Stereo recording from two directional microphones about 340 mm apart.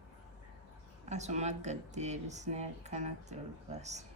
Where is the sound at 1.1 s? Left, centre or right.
Centre.